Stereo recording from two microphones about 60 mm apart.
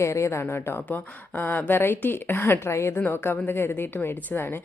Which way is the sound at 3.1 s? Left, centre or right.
Left.